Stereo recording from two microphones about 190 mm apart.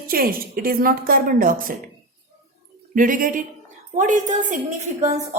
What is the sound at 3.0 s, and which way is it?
A woman's voice, 45° right (ahead or behind).